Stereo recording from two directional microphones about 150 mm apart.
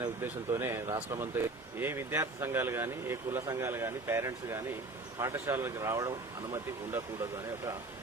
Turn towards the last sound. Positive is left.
turn(degrees=-20)  # may be behind; listen again after turning